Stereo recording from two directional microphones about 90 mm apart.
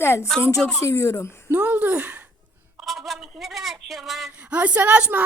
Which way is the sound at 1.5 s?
20° right (ahead or behind).